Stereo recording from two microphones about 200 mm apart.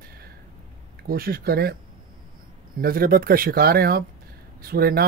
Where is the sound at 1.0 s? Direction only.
50° right (ahead or behind).